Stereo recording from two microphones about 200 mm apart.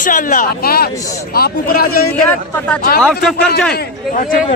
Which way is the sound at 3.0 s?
5° left (ahead or behind).